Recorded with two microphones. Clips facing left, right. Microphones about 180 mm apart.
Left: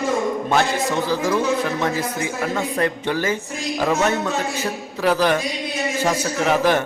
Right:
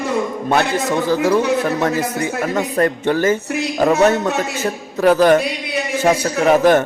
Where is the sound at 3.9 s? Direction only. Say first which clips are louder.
Right 6 dB; 65° right (ahead or behind).